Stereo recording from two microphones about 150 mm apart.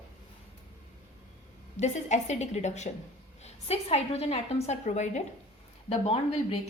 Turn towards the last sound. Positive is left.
turn(degrees=40)  # may be behind; listen again after turning